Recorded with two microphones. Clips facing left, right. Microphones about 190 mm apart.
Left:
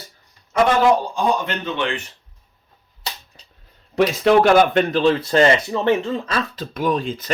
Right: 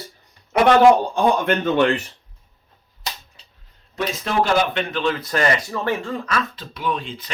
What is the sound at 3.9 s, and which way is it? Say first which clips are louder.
Speech: left 8 dB; 70° left (ahead or behind).